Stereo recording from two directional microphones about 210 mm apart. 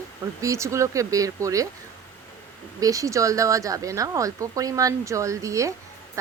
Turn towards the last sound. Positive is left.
turn(degrees=-15)  # may be behind; listen again after turning